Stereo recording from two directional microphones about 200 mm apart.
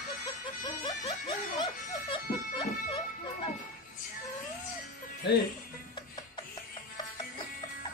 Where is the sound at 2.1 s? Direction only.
25° left (ahead or behind).